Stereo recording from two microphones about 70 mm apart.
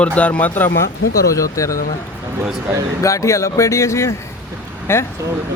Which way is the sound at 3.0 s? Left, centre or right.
Left.